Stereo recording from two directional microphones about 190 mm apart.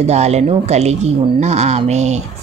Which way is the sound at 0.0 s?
35° right (ahead or behind).